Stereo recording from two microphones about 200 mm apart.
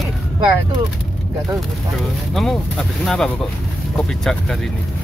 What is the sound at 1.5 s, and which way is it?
Speech, centre (ahead or behind).